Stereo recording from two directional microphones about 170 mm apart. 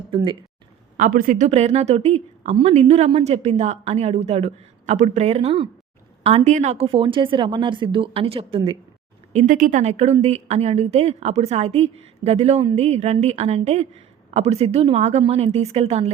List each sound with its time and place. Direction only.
0.1 s a woman's voice: 30° right (ahead or behind)
0.9 s speech: 55° right (ahead or behind)
1.5 s a woman's voice: 40° right (ahead or behind)
9.3 s a woman's voice: 45° right (ahead or behind)